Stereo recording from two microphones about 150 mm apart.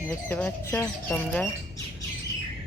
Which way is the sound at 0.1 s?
5° left (ahead or behind).